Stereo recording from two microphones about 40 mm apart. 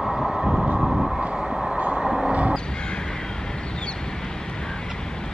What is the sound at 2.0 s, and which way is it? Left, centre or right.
Vehicle, centre.